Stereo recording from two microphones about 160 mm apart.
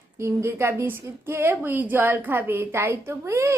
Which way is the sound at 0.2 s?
15° right (ahead or behind).